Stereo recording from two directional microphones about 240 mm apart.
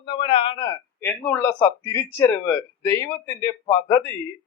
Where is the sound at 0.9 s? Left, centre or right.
Centre.